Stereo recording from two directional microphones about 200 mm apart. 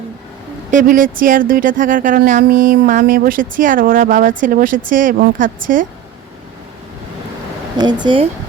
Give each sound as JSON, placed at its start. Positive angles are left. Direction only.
{"t": 0.7, "sound": "speech", "side_deg": -40}
{"t": 7.8, "sound": "speech", "side_deg": -20}